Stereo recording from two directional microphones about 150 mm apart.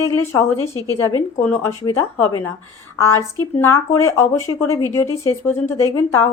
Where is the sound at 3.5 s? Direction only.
20° left (ahead or behind).